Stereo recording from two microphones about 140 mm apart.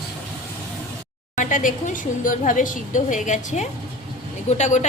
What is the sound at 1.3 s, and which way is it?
A woman's voice, 65° left (ahead or behind).